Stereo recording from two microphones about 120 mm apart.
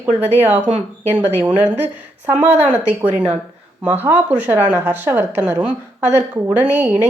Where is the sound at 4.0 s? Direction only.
15° right (ahead or behind).